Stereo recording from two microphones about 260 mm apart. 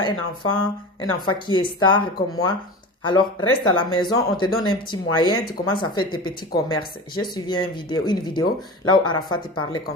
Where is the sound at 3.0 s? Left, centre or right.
Centre.